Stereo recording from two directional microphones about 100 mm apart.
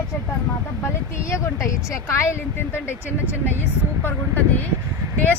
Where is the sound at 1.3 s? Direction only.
30° left (ahead or behind).